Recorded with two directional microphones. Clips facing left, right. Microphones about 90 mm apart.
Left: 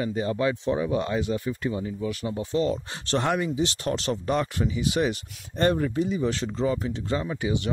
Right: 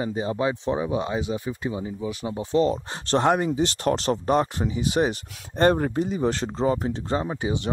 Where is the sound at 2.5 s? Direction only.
35° right (ahead or behind).